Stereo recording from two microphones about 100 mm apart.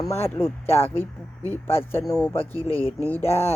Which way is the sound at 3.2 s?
25° left (ahead or behind).